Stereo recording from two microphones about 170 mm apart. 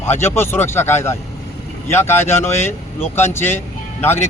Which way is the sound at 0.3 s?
15° left (ahead or behind).